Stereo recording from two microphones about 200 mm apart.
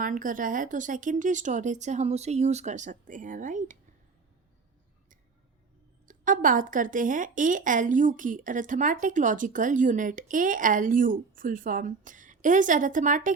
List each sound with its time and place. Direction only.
0.0 s a woman's voice: 40° right (ahead or behind)
6.1 s a woman's voice: 40° right (ahead or behind)